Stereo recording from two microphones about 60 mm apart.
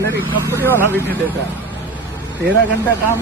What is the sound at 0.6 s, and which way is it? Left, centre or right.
Speech, left.